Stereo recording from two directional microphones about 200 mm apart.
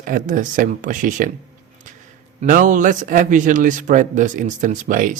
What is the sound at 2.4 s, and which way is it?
Speech, 40° right (ahead or behind).